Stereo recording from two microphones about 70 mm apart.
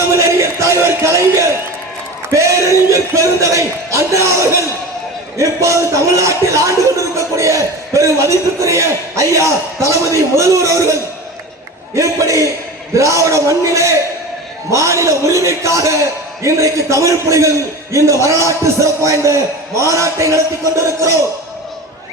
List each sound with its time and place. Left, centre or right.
0.1 s music: right
2.3 s a man's voice: right
11.9 s a man's voice: right